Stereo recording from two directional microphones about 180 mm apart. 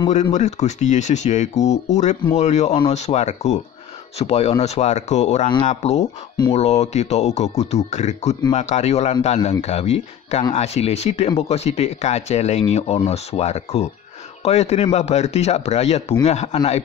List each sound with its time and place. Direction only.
0.1 s speech: 40° left (ahead or behind)